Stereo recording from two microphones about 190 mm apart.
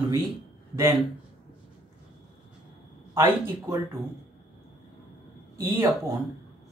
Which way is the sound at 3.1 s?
15° right (ahead or behind).